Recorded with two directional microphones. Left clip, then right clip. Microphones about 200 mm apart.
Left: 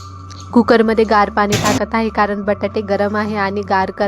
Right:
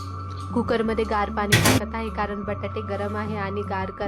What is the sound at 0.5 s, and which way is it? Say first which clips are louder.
A woman's voice: left 12 dB; 35° left (ahead or behind).